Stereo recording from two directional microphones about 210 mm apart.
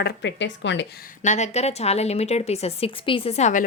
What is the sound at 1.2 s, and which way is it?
A woman's voice, 35° left (ahead or behind).